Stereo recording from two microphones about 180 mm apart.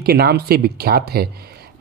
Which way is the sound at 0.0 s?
60° right (ahead or behind).